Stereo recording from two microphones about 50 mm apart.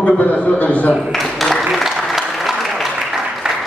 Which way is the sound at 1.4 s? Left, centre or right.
Centre.